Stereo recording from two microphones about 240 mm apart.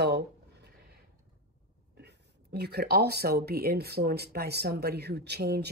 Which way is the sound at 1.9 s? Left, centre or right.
Right.